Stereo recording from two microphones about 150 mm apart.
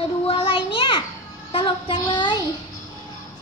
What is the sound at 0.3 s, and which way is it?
Child singing, 40° left (ahead or behind).